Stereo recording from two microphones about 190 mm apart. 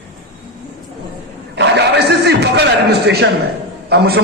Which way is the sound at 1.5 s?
65° right (ahead or behind).